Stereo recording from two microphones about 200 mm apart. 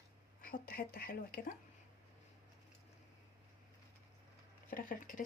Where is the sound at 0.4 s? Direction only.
45° left (ahead or behind).